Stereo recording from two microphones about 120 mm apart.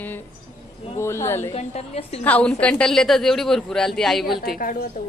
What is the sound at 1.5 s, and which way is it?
Speech, 60° left (ahead or behind).